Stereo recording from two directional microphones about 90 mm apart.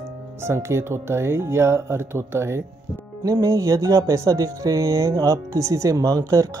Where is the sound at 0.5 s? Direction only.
30° right (ahead or behind).